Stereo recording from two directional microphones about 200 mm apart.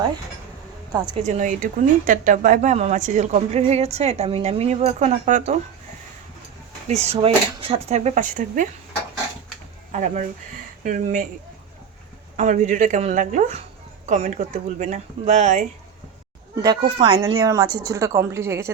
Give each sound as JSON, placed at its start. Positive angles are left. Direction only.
{"t": 0.9, "sound": "speech", "side_deg": -25}
{"t": 1.2, "sound": "a woman's voice", "side_deg": -40}
{"t": 6.8, "sound": "a woman's voice", "side_deg": -35}
{"t": 9.9, "sound": "a woman's voice", "side_deg": -35}
{"t": 12.4, "sound": "a woman's voice", "side_deg": -40}
{"t": 17.0, "sound": "a woman's voice", "side_deg": -25}